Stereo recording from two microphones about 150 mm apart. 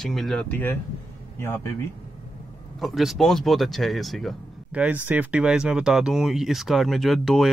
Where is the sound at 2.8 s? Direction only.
Centre (ahead or behind).